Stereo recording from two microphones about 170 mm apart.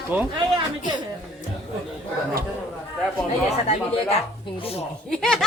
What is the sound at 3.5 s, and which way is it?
Speech, 40° left (ahead or behind).